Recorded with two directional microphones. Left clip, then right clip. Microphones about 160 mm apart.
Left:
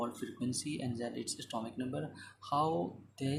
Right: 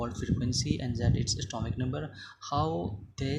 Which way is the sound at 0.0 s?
35° right (ahead or behind).